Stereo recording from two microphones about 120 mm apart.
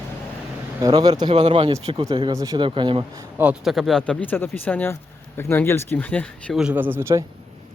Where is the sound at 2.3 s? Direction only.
30° right (ahead or behind).